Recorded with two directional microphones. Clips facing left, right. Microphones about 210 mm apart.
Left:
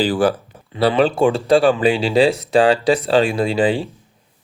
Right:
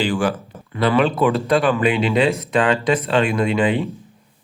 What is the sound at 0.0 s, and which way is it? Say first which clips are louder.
Speech: left 3 dB; 35° left (ahead or behind).